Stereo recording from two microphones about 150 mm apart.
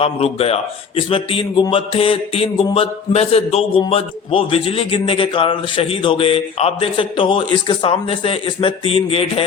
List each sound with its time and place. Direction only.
0.0 s mantra: 45° left (ahead or behind)